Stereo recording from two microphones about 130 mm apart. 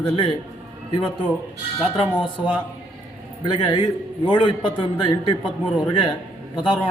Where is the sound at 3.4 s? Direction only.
40° left (ahead or behind).